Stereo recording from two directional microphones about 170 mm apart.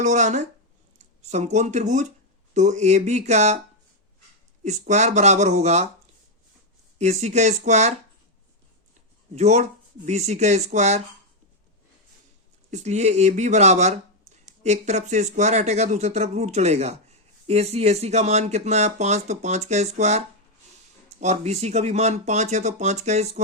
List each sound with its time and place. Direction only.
0.0 s speech: 45° right (ahead or behind)
4.6 s speech: 45° right (ahead or behind)
7.0 s speech: 40° right (ahead or behind)
9.3 s speech: 40° right (ahead or behind)
12.7 s speech: 40° right (ahead or behind)